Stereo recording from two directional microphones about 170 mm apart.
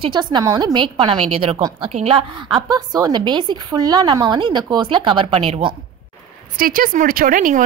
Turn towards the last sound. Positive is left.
turn(degrees=-50)  # may be behind; listen again after turning